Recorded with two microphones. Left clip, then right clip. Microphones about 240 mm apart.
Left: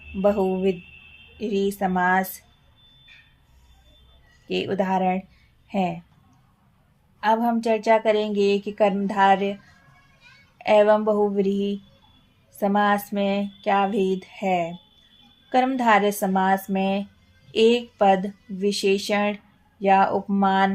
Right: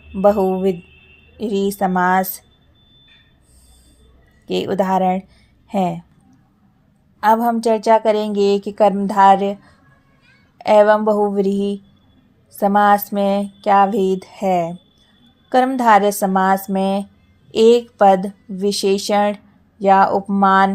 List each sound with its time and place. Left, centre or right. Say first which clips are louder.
0.2 s a woman's voice: right 7 dB; right
4.4 s a woman's voice: right 6 dB; right
7.2 s a woman's voice: right 6 dB; right
10.6 s a woman's voice: right 5 dB; right